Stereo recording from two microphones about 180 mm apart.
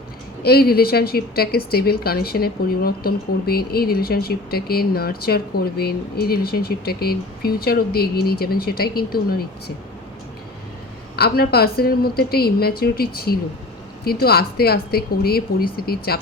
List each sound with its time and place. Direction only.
0.4 s speech: 60° left (ahead or behind)
11.2 s speech: 60° left (ahead or behind)